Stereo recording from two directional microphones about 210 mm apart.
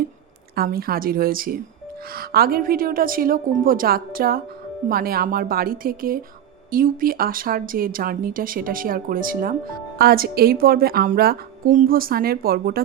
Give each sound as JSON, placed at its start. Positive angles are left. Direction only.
{"t": 0.5, "sound": "speech", "side_deg": -45}